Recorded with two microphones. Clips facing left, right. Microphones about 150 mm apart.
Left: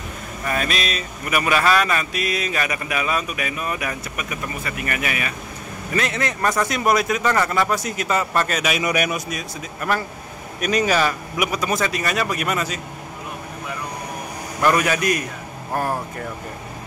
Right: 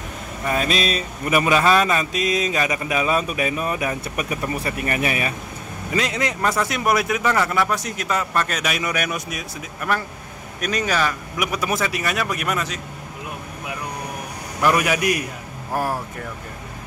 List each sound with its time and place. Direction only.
0.5 s speech: 25° right (ahead or behind)
5.9 s a man's voice: 15° right (ahead or behind); by 9.2 s 10° left (ahead or behind)
9.3 s speech: 5° right (ahead or behind)
10.6 s speech: 10° left (ahead or behind)
14.6 s a man's voice: 10° right (ahead or behind)